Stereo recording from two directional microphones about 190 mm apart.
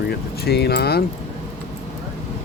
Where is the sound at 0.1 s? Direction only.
55° left (ahead or behind).